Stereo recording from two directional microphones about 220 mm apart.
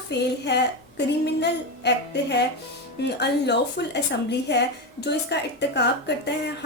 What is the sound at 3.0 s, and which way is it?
A woman's voice, 50° left (ahead or behind).